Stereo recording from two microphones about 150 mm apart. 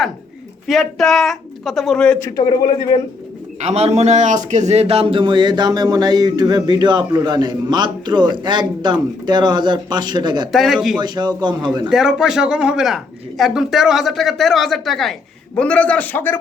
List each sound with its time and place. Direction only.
0.7 s speech: centre (ahead or behind)
2.2 s speech: 25° left (ahead or behind)
3.6 s a man's voice: 45° right (ahead or behind); by 10.5 s 30° right (ahead or behind)
10.5 s speech: centre (ahead or behind)
11.0 s a man's voice: 30° right (ahead or behind)
11.9 s a man's voice: 5° right (ahead or behind)